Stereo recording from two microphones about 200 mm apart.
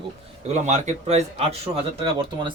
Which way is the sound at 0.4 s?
35° right (ahead or behind).